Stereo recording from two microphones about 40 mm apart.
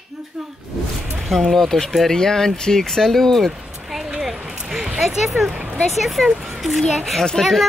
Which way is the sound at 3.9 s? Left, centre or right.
Centre.